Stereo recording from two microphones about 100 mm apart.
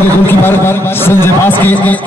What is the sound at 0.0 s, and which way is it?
Speech, 20° left (ahead or behind).